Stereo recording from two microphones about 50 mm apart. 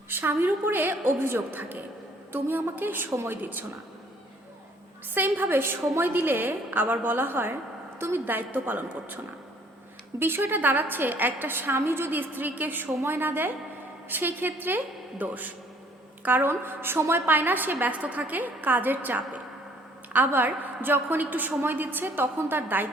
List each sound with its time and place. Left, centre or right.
0.1 s a sound: right
0.4 s a woman's voice: right
5.1 s a woman's voice: right
10.2 s a woman's voice: right